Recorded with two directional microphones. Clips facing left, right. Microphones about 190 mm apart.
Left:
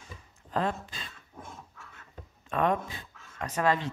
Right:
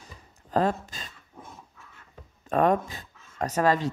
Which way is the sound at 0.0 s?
40° right (ahead or behind).